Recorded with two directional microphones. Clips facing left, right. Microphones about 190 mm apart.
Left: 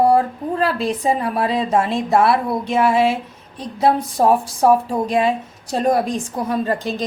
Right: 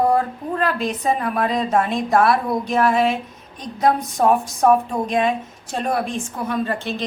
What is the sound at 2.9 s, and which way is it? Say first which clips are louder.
A woman's voice: left 2 dB; 30° left (ahead or behind).